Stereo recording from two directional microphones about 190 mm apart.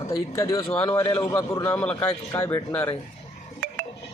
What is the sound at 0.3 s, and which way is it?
A man's voice, 15° left (ahead or behind).